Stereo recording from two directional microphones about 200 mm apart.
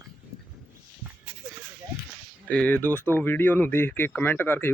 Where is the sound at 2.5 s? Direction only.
5° left (ahead or behind).